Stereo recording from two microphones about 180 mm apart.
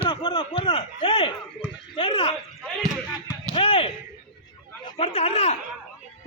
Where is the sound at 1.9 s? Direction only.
30° left (ahead or behind).